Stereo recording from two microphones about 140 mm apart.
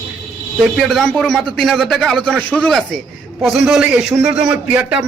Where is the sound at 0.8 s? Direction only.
Centre (ahead or behind).